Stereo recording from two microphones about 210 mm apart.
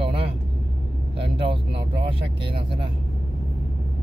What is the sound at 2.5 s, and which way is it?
Speech, 25° right (ahead or behind).